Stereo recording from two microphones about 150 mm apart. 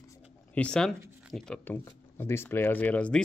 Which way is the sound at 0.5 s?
5° left (ahead or behind).